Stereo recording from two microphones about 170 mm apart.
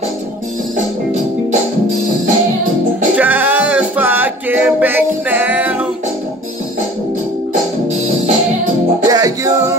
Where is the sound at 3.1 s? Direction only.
10° right (ahead or behind).